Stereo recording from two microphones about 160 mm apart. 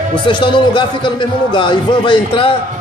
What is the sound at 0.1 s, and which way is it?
A man's voice, 30° left (ahead or behind).